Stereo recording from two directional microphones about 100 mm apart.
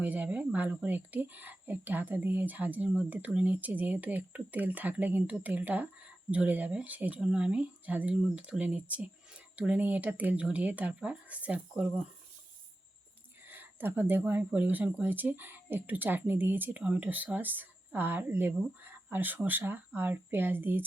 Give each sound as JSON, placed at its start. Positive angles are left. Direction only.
{"t": 0.0, "sound": "speech", "side_deg": -15}
{"t": 13.5, "sound": "speech", "side_deg": -20}